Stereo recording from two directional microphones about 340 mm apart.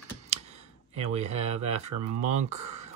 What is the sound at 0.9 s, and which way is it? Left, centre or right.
Speech, centre.